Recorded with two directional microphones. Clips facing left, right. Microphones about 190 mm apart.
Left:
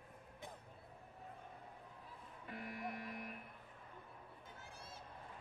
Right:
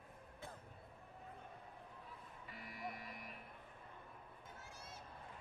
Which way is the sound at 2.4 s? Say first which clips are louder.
Left 4 dB; 55° left (ahead or behind).